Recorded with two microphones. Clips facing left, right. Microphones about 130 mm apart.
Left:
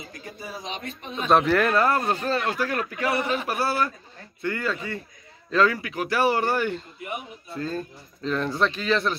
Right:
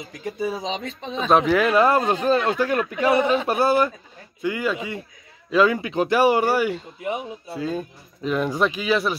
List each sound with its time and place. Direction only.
0.2 s speech: 90° right
1.3 s speech: 5° right (ahead or behind)
7.0 s speech: 90° right
7.5 s speech: 10° right (ahead or behind)